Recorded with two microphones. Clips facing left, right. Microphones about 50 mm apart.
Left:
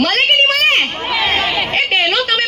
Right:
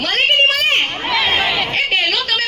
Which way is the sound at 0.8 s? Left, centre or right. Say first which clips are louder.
Even; centre.